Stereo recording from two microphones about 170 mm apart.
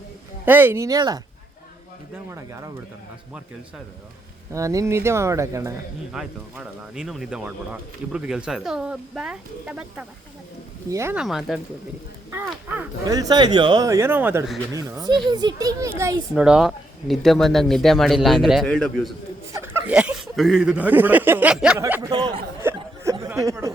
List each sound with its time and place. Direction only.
0.4 s speech: 10° right (ahead or behind)
2.3 s speech: 20° right (ahead or behind)
4.5 s speech: 20° right (ahead or behind)
6.1 s speech: 5° right (ahead or behind)
10.8 s speech: 15° right (ahead or behind)
11.2 s speech: centre (ahead or behind)
12.6 s speech: 10° right (ahead or behind)
13.1 s speech: 20° right (ahead or behind)
16.3 s speech: 5° right (ahead or behind)
19.6 s speech: 10° right (ahead or behind)
22.6 s a sound: 15° right (ahead or behind)